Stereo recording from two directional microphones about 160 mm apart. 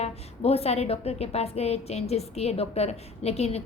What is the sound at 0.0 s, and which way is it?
A woman's voice, 40° left (ahead or behind).